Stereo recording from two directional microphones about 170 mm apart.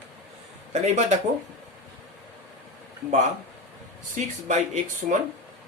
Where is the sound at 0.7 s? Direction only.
40° right (ahead or behind).